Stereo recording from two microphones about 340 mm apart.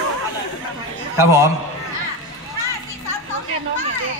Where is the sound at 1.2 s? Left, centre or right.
Centre.